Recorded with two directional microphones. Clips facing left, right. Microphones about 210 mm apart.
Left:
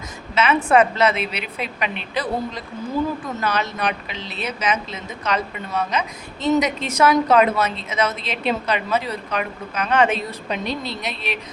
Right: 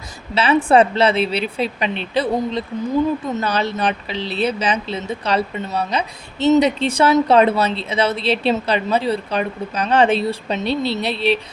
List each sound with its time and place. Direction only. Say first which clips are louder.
0.3 s a woman's voice: right 3 dB; 30° right (ahead or behind)